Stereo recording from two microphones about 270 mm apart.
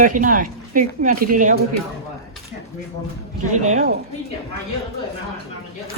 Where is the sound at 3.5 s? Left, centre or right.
Right.